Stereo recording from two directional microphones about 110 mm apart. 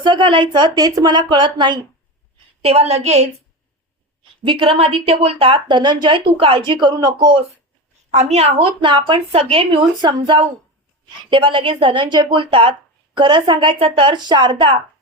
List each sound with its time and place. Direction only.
0.0 s speech: 45° right (ahead or behind)
2.6 s a woman's voice: 70° right (ahead or behind)
4.2 s speech: 50° right (ahead or behind)
8.1 s a woman's voice: 75° right (ahead or behind); by 12.7 s 55° right (ahead or behind)
13.1 s speech: 45° right (ahead or behind)